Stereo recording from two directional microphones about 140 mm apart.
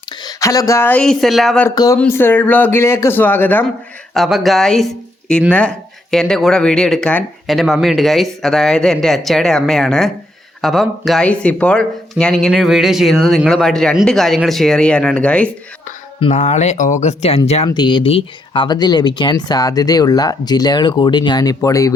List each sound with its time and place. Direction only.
0.3 s a man's voice: 25° left (ahead or behind); by 1.6 s centre (ahead or behind)
1.7 s speech: 25° left (ahead or behind)
2.0 s a man's voice: 15° left (ahead or behind)
4.1 s speech: centre (ahead or behind)
16.3 s speech: 55° left (ahead or behind)
17.7 s speech: 30° left (ahead or behind)